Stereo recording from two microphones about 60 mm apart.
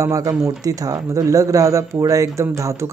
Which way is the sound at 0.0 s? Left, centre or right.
Right.